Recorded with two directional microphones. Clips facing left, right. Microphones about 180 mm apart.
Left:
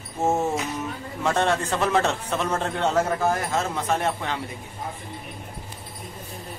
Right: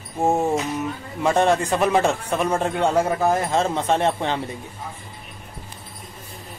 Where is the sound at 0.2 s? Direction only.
15° right (ahead or behind).